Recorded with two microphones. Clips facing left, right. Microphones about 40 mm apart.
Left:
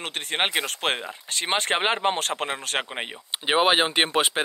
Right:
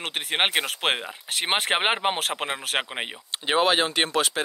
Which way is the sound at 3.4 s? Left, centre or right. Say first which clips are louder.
Left 1 dB; centre.